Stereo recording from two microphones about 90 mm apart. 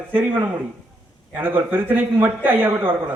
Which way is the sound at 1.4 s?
20° right (ahead or behind).